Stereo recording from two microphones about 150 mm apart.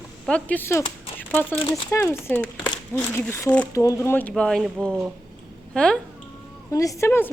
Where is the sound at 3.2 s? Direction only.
20° left (ahead or behind).